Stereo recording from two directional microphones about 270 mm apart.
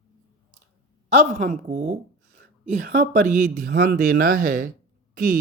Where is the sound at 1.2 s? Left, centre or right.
Right.